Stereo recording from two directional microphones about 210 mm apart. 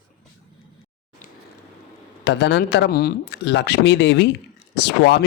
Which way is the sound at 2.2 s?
55° left (ahead or behind).